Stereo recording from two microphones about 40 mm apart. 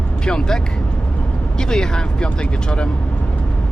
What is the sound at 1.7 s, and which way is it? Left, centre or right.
Speech, centre.